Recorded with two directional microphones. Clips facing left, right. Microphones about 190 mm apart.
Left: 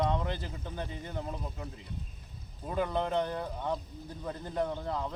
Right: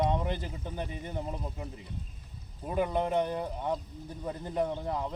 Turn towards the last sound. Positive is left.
turn(degrees=-15)  # may be behind; listen again after turning